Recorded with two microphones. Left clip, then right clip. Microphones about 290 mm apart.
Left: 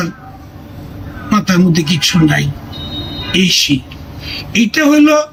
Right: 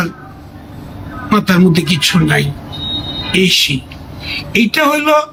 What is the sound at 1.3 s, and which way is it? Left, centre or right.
A man's voice, centre.